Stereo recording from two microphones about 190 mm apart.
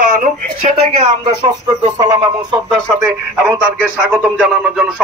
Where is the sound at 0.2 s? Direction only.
35° right (ahead or behind).